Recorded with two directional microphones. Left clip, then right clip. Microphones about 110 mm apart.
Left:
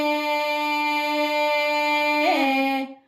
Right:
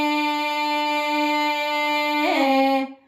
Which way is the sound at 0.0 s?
20° right (ahead or behind).